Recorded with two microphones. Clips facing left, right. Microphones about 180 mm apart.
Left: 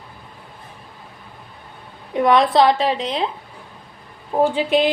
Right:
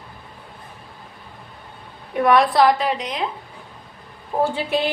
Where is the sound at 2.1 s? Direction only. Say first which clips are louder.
Left 1 dB; 20° left (ahead or behind).